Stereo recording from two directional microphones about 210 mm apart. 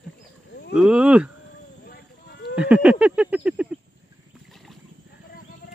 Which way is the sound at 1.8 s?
50° left (ahead or behind).